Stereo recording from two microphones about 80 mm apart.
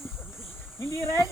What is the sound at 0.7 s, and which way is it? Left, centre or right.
Speech, left.